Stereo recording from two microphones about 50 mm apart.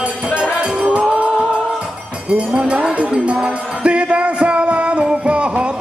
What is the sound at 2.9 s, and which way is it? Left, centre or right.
Music, right.